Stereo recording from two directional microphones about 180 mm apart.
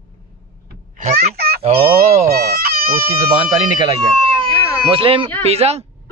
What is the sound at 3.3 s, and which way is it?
Speech, 20° right (ahead or behind).